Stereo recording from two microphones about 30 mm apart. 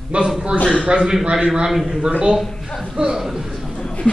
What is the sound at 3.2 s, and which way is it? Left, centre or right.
Speech, centre.